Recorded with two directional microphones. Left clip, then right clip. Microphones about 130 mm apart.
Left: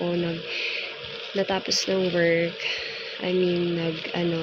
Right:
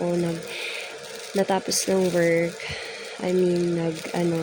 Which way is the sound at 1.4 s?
35° right (ahead or behind).